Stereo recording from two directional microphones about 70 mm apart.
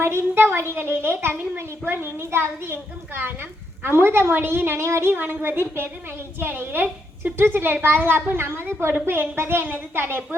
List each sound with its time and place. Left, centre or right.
0.0 s a child's voice: right